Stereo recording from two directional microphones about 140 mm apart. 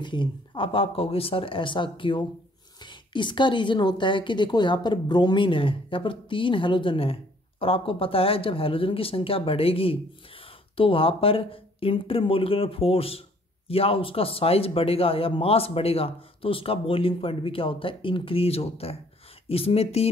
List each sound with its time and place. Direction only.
0.0 s a woman's voice: 35° left (ahead or behind)